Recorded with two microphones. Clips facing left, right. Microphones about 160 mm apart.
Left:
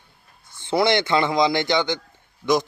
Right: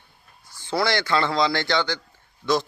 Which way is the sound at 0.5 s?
20° left (ahead or behind).